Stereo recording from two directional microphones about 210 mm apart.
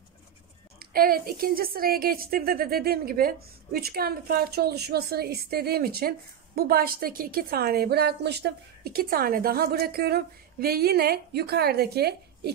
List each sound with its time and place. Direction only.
0.7 s a woman's voice: 45° right (ahead or behind)